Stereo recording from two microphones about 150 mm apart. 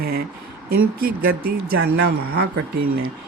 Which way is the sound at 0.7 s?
80° right.